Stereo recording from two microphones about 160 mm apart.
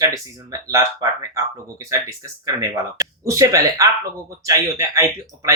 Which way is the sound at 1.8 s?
20° right (ahead or behind).